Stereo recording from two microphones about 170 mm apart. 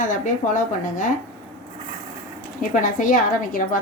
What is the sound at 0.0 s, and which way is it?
A woman's voice, 50° left (ahead or behind).